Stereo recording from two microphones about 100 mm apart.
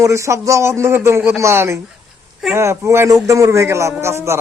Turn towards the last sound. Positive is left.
turn(degrees=-25)  # may be behind; listen again after turning